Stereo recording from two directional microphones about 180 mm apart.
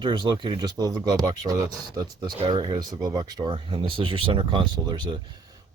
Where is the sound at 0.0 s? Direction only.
25° right (ahead or behind).